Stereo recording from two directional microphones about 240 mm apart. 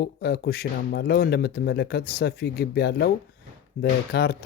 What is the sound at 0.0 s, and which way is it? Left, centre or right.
Speech, left.